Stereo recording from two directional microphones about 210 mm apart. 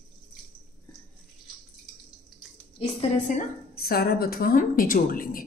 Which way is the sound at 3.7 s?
45° left (ahead or behind).